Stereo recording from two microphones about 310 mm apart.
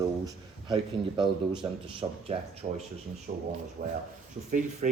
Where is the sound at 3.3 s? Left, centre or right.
Right.